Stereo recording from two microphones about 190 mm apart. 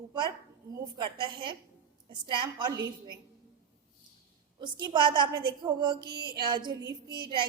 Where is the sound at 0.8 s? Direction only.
25° right (ahead or behind).